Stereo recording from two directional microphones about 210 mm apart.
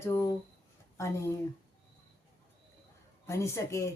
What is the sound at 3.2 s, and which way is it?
Speech, 15° left (ahead or behind).